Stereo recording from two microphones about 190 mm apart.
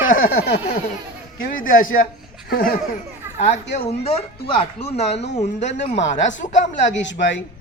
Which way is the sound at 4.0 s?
30° left (ahead or behind).